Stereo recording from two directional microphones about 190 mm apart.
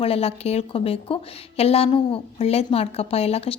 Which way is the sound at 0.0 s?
30° left (ahead or behind).